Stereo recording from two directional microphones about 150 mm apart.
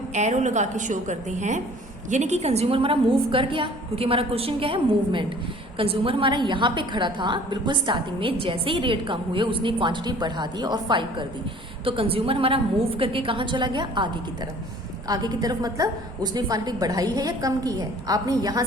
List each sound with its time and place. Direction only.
0.1 s a woman's voice: 50° right (ahead or behind); by 18.6 s 25° right (ahead or behind)